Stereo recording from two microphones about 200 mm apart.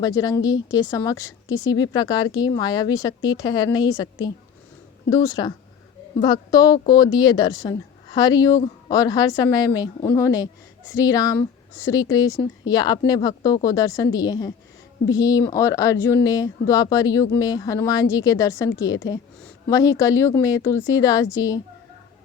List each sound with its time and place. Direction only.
0.0 s speech: 20° left (ahead or behind)
19.7 s speech: 15° left (ahead or behind)